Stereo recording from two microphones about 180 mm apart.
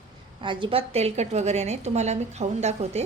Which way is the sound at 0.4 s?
25° right (ahead or behind).